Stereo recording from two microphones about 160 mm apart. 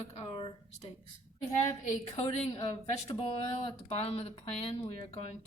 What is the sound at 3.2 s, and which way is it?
Speech, 35° left (ahead or behind).